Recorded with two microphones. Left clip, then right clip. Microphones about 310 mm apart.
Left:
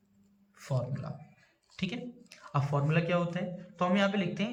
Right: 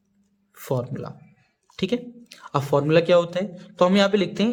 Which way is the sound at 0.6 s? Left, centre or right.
Centre.